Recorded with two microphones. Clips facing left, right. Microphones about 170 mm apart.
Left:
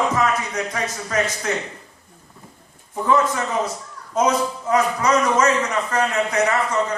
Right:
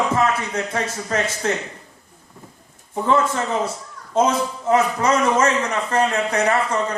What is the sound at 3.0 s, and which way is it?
A man's voice, 30° right (ahead or behind).